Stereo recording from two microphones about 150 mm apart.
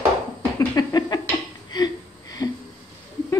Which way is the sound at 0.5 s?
25° left (ahead or behind).